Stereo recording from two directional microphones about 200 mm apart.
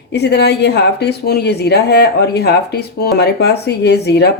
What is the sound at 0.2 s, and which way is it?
Speech, 55° left (ahead or behind).